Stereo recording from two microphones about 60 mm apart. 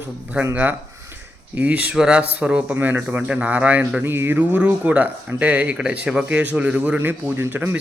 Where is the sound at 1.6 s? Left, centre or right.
Right.